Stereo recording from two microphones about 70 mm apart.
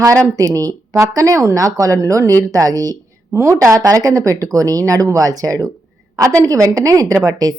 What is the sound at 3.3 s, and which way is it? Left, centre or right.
A woman's voice, right.